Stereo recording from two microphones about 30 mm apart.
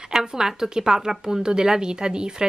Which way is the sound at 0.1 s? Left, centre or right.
Centre.